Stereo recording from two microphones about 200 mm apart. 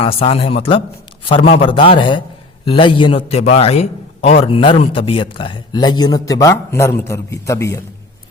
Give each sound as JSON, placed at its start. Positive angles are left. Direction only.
{"t": 0.0, "sound": "a man's voice", "side_deg": 30}